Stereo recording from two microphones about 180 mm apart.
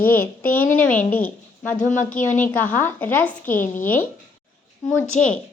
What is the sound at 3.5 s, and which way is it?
Speech, 45° left (ahead or behind).